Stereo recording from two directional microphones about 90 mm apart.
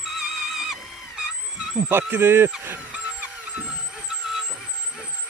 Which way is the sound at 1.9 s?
25° right (ahead or behind).